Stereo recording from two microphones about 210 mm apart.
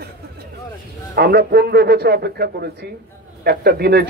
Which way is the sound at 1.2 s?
45° right (ahead or behind).